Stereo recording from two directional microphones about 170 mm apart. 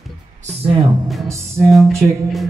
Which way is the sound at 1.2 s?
15° right (ahead or behind).